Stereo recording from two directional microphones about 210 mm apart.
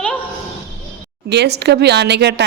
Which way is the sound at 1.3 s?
55° right (ahead or behind).